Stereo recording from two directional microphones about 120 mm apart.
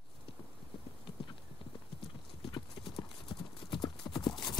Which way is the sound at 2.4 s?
45° left (ahead or behind).